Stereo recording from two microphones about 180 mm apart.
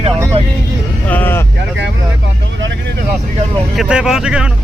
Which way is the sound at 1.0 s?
10° left (ahead or behind).